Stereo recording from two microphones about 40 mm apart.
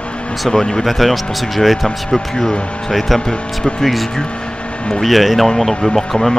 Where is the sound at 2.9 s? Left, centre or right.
Centre.